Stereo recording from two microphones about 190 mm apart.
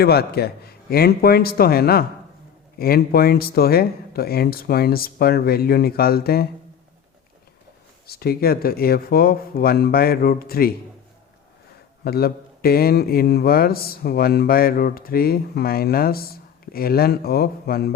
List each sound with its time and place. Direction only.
0.0 s speech: 55° left (ahead or behind)
8.0 s speech: 55° left (ahead or behind)
12.0 s speech: 55° left (ahead or behind)